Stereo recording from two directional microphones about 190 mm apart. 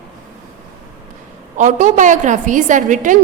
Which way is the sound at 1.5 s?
40° right (ahead or behind).